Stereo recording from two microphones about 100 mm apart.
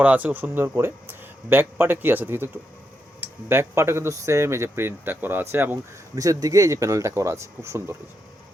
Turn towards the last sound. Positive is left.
turn(degrees=-25)  # may be behind; listen again after turning